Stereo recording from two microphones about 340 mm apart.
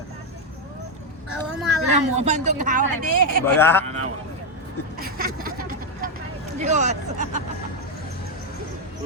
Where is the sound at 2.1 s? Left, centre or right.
Centre.